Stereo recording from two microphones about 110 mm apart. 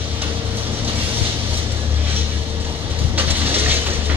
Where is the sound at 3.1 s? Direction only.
20° right (ahead or behind).